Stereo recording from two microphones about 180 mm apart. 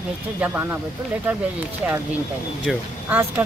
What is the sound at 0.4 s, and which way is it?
Speech, 10° right (ahead or behind).